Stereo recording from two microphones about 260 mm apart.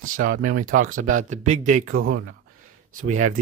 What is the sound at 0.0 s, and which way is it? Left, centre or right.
Speech, right.